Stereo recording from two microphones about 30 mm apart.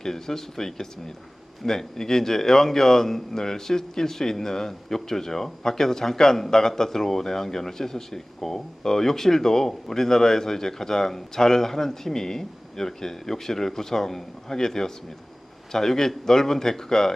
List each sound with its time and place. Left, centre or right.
0.0 s a man's voice: centre